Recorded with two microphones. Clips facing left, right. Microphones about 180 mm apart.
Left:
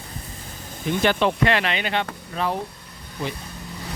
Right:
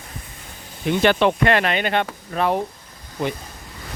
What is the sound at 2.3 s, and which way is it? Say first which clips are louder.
Speech: right 5 dB; 60° right (ahead or behind).